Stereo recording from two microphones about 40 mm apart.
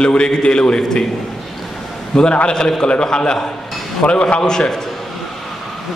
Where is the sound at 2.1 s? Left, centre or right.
Centre.